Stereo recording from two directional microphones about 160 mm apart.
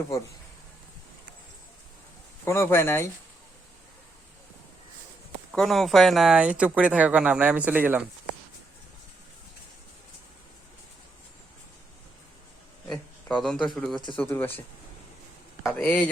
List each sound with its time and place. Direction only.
2.4 s speech: 15° left (ahead or behind)
5.5 s speech: centre (ahead or behind)
12.9 s speech: 5° left (ahead or behind)
14.2 s speech: 10° left (ahead or behind)
15.8 s speech: 10° left (ahead or behind)